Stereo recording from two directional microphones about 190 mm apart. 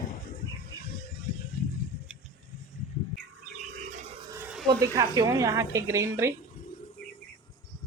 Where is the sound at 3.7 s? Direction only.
45° right (ahead or behind).